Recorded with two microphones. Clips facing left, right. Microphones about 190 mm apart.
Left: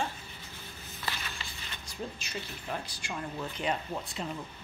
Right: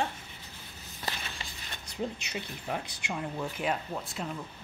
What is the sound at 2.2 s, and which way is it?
Speech, 20° right (ahead or behind).